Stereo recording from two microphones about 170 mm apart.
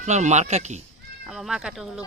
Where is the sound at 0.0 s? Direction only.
40° right (ahead or behind).